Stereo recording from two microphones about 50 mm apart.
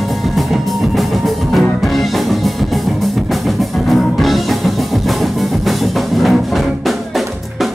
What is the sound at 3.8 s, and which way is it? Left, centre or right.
Music, centre.